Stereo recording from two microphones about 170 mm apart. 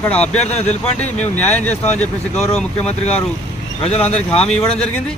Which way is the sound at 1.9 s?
5° left (ahead or behind).